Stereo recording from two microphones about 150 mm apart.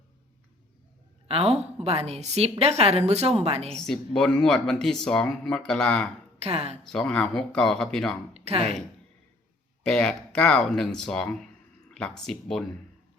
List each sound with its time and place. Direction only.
1.3 s a woman's voice: 40° right (ahead or behind)
3.7 s speech: 5° left (ahead or behind)
6.4 s a woman's voice: 45° right (ahead or behind)
6.8 s speech: 5° left (ahead or behind)
8.3 s a woman's voice: 45° right (ahead or behind)
9.8 s speech: 5° left (ahead or behind)